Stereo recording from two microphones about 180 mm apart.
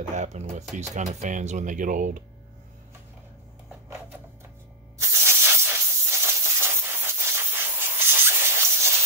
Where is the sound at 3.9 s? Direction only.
15° right (ahead or behind).